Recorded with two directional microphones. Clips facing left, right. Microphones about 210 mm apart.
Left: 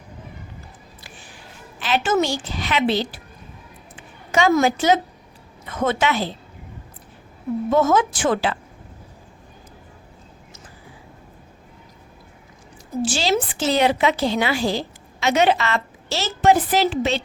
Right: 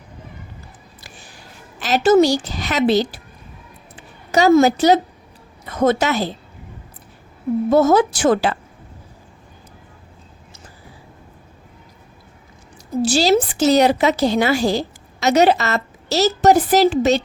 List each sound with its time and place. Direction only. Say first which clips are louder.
1.0 s a sound: right 1 dB; 40° right (ahead or behind)
4.6 s a woman's voice: right 4 dB; 40° right (ahead or behind)
7.7 s a woman's voice: right 4 dB; 40° right (ahead or behind)
13.1 s a woman's voice: right 7 dB; 40° right (ahead or behind)